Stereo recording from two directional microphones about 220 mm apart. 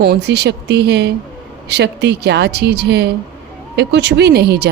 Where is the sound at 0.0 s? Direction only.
50° right (ahead or behind).